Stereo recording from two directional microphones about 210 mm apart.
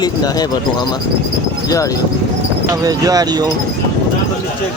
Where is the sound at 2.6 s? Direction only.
15° right (ahead or behind).